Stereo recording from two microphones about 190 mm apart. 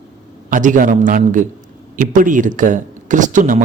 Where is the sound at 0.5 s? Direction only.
45° right (ahead or behind).